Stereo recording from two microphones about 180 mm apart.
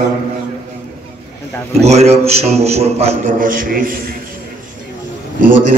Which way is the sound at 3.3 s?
50° right (ahead or behind).